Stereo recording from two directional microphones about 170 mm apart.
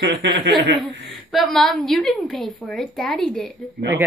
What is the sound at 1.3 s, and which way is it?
A woman's voice, centre (ahead or behind).